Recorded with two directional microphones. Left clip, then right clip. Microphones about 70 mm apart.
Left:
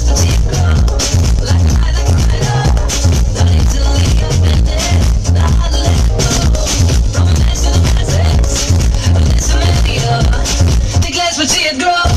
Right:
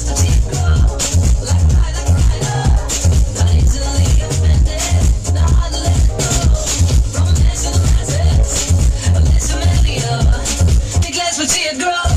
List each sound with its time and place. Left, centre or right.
11.1 s music: centre